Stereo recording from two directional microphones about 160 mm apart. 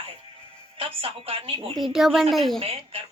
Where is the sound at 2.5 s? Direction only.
35° right (ahead or behind).